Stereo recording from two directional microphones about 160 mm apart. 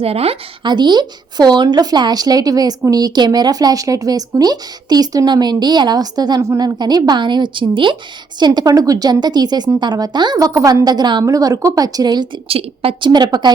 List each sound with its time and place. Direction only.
0.0 s speech: 40° right (ahead or behind)
13.1 s speech: 25° right (ahead or behind)